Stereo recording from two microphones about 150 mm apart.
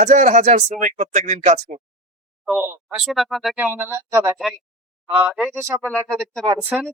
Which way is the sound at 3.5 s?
15° right (ahead or behind).